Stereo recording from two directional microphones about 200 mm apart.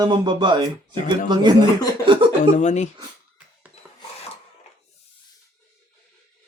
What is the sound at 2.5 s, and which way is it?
Speech, 35° left (ahead or behind).